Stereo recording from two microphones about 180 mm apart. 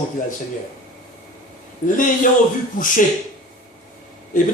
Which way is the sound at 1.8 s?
45° left (ahead or behind).